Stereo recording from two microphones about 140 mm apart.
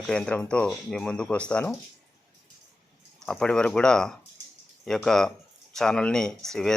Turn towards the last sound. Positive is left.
turn(degrees=5)  # may be behind; listen again after turning